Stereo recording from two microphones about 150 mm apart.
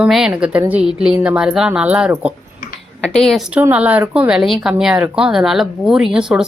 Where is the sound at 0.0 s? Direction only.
5° right (ahead or behind).